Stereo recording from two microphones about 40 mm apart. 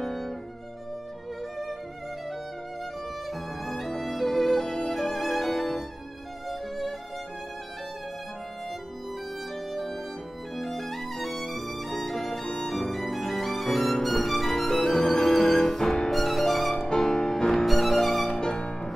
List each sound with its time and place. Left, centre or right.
0.0 s violin: centre
3.3 s violin: centre
9.7 s music: centre
10.5 s violin: centre
14.0 s music: centre
16.9 s music: centre
17.6 s music: centre
18.3 s music: centre